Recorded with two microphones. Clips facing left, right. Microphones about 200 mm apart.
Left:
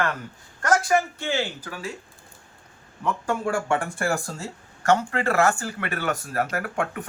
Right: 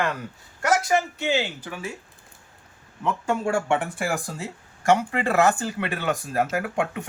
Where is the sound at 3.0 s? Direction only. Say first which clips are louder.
Right 1 dB; 25° right (ahead or behind).